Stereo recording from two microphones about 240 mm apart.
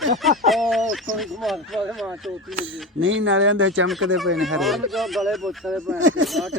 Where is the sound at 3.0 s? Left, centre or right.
Right.